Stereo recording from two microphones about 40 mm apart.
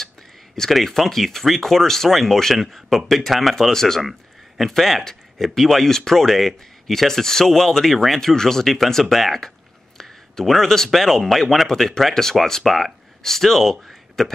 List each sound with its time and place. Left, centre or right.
0.7 s speech: centre
9.9 s a sound: centre
10.9 s speech: centre